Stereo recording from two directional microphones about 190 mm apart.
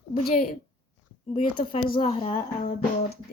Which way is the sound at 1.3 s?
25° left (ahead or behind).